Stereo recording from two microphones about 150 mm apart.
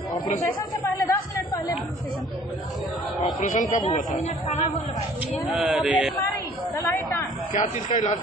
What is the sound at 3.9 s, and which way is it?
Speech, 50° left (ahead or behind).